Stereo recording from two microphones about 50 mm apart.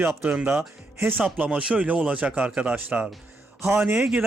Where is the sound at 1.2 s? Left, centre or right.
Right.